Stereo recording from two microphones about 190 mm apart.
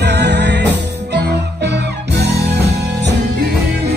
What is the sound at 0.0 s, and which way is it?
Music, 60° right (ahead or behind).